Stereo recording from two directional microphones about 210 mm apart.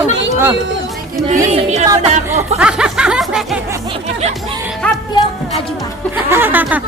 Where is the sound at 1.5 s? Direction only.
30° right (ahead or behind).